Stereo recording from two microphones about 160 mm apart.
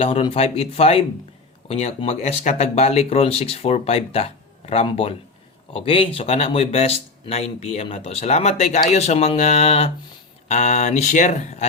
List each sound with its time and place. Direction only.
0.0 s speech: 35° left (ahead or behind)